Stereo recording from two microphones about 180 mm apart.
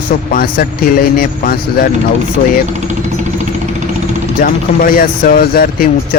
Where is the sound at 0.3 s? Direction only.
50° left (ahead or behind).